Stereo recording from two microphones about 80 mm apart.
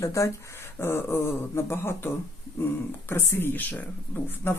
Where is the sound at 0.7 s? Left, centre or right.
Left.